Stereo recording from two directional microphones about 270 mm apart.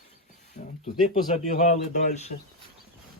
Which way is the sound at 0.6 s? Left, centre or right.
Left.